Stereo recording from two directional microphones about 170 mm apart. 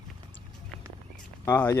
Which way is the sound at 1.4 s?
15° left (ahead or behind).